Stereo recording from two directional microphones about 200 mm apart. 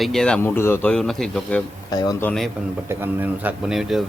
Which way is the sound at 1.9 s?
20° left (ahead or behind).